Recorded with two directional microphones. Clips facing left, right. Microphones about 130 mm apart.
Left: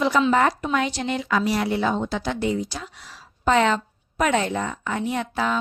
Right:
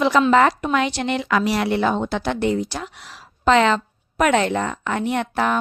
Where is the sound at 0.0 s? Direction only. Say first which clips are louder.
Right 4 dB; 85° right.